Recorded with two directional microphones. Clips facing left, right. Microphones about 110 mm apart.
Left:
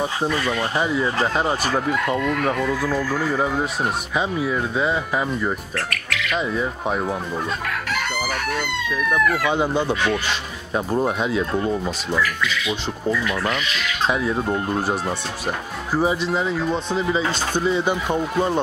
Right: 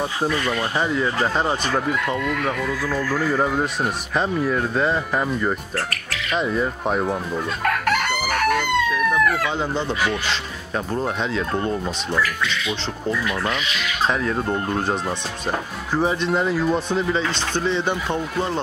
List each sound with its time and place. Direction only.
0.0 s speech: centre (ahead or behind)
3.2 s speech: centre (ahead or behind)
5.9 s speech: 35° right (ahead or behind)
6.3 s speech: centre (ahead or behind)
7.6 s chicken: 55° right (ahead or behind)
9.1 s speech: 15° left (ahead or behind)
14.0 s speech: 5° left (ahead or behind)